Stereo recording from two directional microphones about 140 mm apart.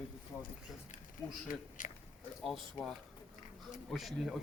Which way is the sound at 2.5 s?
5° left (ahead or behind).